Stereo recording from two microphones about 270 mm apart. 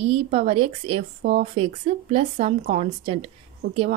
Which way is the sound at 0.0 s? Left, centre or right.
Right.